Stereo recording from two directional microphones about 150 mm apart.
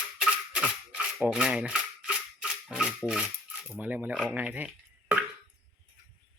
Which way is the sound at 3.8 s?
10° right (ahead or behind).